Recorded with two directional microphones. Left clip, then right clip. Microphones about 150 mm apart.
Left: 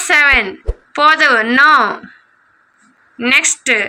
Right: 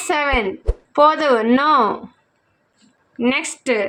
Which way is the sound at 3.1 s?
5° right (ahead or behind).